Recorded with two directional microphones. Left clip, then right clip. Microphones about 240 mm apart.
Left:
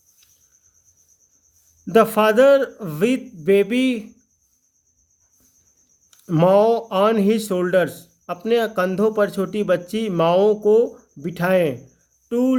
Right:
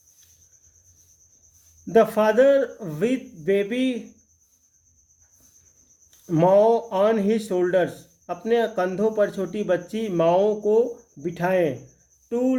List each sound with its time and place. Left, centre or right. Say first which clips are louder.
1.9 s speech: left 3 dB; left
6.1 s speech: left 2 dB; left